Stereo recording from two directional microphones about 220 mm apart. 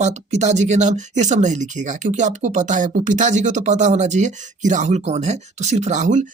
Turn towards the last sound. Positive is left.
turn(degrees=-35)  # may be behind; listen again after turning